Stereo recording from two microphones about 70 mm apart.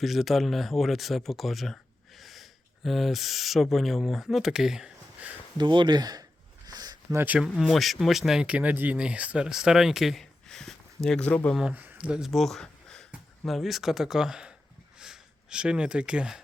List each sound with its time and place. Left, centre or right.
0.0 s speech: centre
5.5 s speech: right
6.7 s a sound: right
7.3 s speech: centre
8.4 s speech: right; by 11.3 s centre
11.7 s speech: right
11.9 s speech: centre
12.3 s a sound: centre
13.4 s speech: centre
14.9 s a sound: centre